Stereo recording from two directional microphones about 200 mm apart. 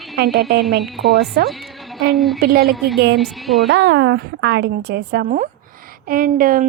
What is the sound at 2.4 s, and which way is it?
Speech, 50° right (ahead or behind).